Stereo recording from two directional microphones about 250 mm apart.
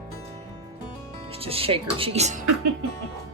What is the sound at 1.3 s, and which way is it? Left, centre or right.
Speech, right.